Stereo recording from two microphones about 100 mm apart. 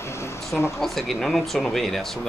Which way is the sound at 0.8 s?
Centre (ahead or behind).